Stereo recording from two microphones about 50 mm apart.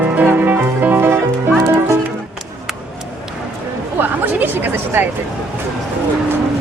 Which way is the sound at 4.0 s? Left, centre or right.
Right.